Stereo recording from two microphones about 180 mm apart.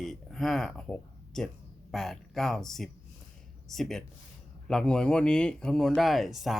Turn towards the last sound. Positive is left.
turn(degrees=0)  # may be behind; listen again after turning